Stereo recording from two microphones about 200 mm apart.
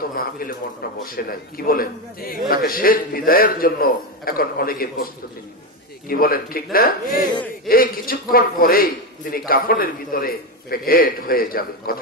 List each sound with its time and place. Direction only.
0.1 s a man's voice: 45° left (ahead or behind)
6.0 s a man's voice: 45° left (ahead or behind)